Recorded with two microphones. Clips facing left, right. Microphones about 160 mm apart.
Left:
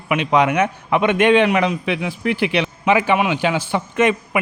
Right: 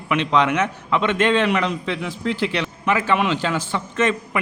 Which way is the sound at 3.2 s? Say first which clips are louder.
Left 2 dB; 10° left (ahead or behind).